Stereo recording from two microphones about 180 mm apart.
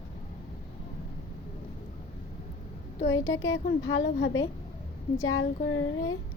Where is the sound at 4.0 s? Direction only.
70° left (ahead or behind).